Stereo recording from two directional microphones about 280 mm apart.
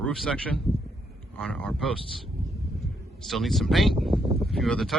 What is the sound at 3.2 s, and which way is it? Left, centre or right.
Speech, centre.